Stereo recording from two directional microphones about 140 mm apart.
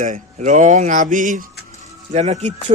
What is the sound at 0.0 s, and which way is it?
Speech, 65° right (ahead or behind).